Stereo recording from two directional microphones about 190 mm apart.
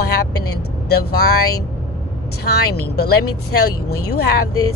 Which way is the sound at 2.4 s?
55° left (ahead or behind).